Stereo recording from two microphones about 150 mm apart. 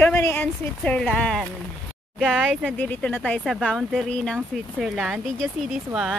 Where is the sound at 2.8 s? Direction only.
10° left (ahead or behind).